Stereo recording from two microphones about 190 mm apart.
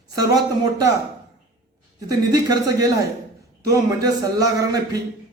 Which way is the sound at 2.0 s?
20° right (ahead or behind).